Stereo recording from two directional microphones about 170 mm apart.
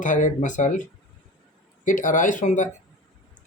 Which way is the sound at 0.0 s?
50° left (ahead or behind).